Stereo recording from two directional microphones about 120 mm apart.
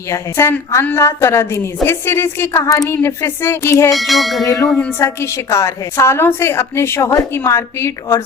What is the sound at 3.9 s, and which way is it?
Speech, centre (ahead or behind).